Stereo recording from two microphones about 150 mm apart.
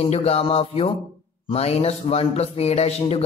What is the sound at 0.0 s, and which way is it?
A man's voice, 45° left (ahead or behind).